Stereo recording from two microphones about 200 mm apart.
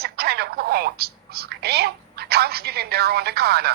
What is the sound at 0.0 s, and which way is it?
A woman's voice, 50° right (ahead or behind).